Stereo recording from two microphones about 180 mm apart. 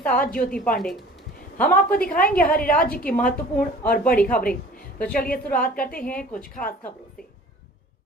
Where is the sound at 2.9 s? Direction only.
10° left (ahead or behind).